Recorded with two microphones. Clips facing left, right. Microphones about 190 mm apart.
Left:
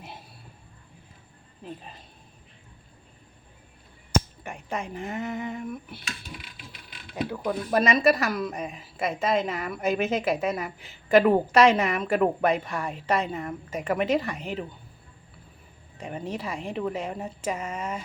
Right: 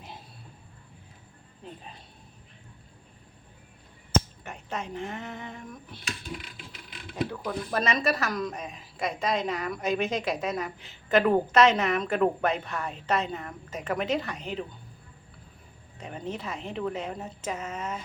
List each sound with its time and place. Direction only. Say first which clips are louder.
4.1 s speech: left 1 dB; 10° left (ahead or behind)
7.4 s a woman's voice: left 7 dB; 10° left (ahead or behind)
16.0 s a woman's voice: left 3 dB; 10° left (ahead or behind)